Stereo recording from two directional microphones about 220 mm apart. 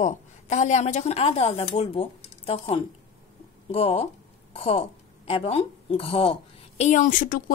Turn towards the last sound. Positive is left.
turn(degrees=40)  # may be behind; listen again after turning